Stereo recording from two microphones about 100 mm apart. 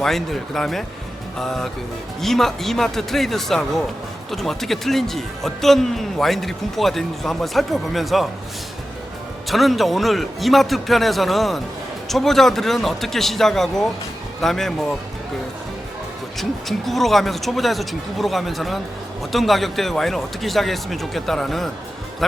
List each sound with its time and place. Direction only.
0.0 s a man's voice: 5° left (ahead or behind)
9.5 s a man's voice: centre (ahead or behind)
16.4 s a man's voice: centre (ahead or behind)